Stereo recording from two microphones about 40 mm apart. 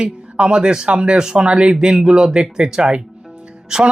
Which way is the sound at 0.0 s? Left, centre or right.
Right.